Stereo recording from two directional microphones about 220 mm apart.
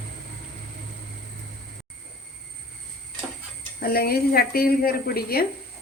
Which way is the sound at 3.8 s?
45° left (ahead or behind).